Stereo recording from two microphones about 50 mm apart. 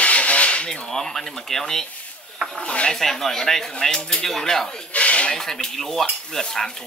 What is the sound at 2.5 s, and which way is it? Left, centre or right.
Speech, left.